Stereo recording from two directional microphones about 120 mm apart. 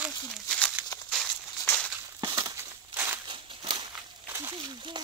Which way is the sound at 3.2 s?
40° right (ahead or behind).